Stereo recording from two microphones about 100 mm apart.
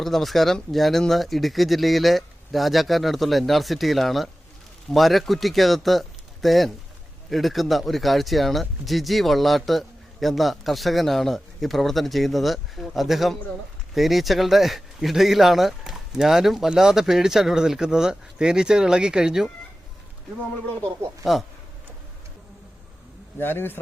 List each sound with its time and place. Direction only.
0.0 s speech: centre (ahead or behind)
23.4 s a man's voice: 20° left (ahead or behind)